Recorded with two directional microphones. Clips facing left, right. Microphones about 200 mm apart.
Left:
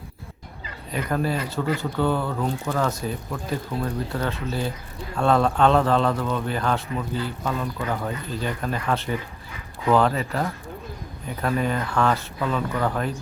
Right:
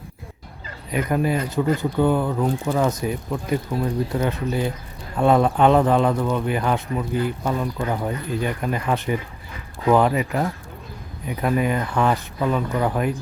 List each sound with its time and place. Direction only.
1.1 s speech: 15° right (ahead or behind)